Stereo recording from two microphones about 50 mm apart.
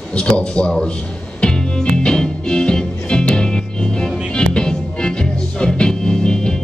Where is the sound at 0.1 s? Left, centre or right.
Centre.